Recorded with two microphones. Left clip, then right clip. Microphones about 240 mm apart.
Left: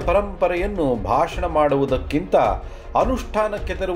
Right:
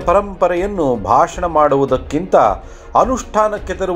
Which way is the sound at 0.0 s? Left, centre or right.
Right.